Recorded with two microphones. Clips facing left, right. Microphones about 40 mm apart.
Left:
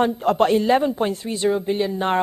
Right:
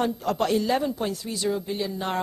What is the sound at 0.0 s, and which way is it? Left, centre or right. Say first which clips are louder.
A man's voice: left 7 dB; left.